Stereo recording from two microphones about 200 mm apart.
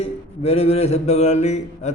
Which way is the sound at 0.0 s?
30° left (ahead or behind).